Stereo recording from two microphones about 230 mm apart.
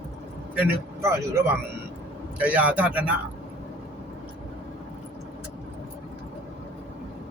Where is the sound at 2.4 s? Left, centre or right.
Centre.